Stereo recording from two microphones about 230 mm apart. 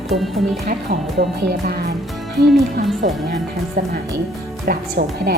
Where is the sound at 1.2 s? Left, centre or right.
Right.